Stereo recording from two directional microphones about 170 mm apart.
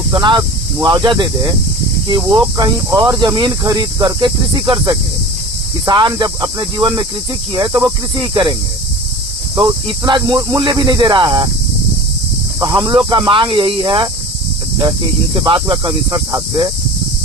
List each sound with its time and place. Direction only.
0.1 s speech: 25° right (ahead or behind)
9.6 s speech: 25° right (ahead or behind)
12.5 s speech: 20° right (ahead or behind)
15.4 s speech: 30° right (ahead or behind)